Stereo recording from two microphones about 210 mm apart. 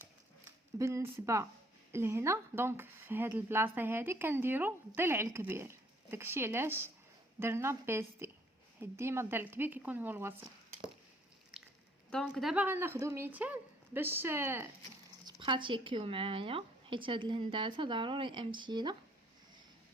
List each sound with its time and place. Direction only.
0.8 s speech: 15° right (ahead or behind)
12.1 s speech: centre (ahead or behind)
15.3 s speech: 25° right (ahead or behind)